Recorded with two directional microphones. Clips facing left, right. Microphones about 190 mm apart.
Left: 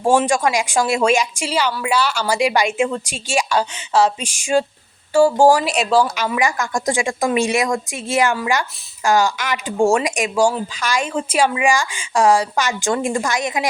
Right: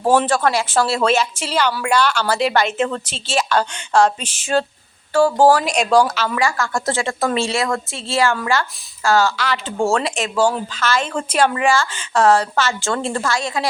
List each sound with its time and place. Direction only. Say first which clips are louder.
0.0 s speech: even; 10° left (ahead or behind)
6.1 s speech: even; 15° left (ahead or behind)